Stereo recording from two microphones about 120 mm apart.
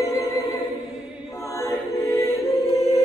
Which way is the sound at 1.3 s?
25° left (ahead or behind).